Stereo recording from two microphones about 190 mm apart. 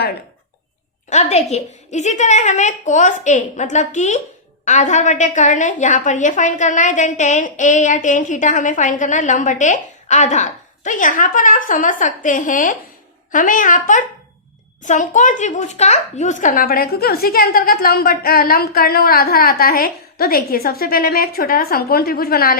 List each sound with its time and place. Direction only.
1.1 s a woman's voice: 35° left (ahead or behind); by 22.5 s 50° left (ahead or behind)